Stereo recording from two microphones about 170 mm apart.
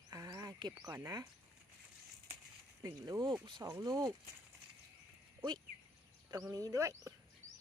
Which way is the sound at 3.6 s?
15° right (ahead or behind).